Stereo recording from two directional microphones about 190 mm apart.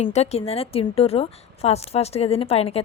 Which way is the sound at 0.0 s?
35° left (ahead or behind).